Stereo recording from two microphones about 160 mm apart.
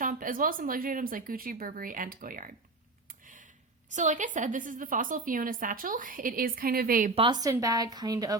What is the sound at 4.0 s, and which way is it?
Speech, 50° right (ahead or behind).